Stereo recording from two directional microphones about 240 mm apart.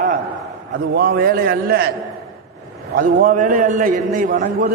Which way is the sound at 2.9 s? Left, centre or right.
Right.